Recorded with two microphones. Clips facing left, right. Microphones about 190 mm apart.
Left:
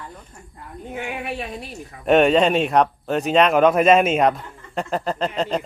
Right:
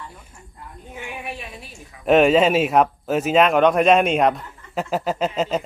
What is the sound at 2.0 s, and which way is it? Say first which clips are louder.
Speech: right 1 dB; centre (ahead or behind).